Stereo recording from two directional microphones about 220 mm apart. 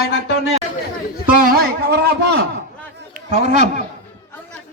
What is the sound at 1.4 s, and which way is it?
Speech, 40° right (ahead or behind).